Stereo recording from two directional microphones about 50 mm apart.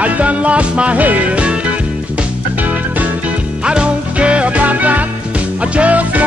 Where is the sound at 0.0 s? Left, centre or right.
Right.